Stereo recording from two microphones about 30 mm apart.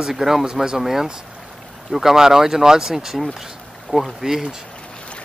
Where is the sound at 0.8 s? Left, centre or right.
Centre.